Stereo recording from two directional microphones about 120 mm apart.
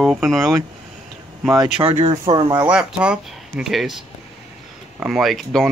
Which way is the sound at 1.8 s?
55° right (ahead or behind).